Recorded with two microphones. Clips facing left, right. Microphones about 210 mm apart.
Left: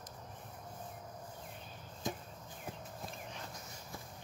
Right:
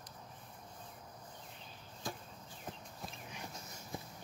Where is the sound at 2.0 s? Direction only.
20° left (ahead or behind).